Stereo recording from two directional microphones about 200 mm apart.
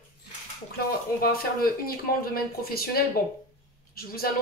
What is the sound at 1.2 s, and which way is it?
Speech, 45° left (ahead or behind).